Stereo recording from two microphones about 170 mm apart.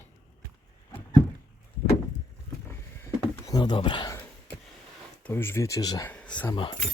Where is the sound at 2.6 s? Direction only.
15° left (ahead or behind).